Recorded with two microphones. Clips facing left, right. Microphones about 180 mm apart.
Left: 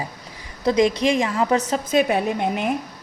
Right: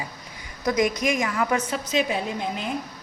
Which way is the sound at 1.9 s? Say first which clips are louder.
Left 6 dB; 55° left (ahead or behind).